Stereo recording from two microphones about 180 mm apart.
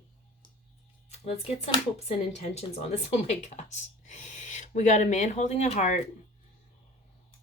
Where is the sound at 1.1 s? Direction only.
35° left (ahead or behind).